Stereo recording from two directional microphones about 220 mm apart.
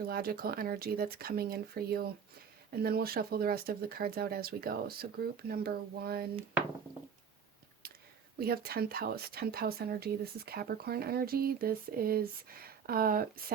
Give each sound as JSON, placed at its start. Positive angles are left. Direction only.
{"t": 0.1, "sound": "speech", "side_deg": -40}
{"t": 8.4, "sound": "speech", "side_deg": -45}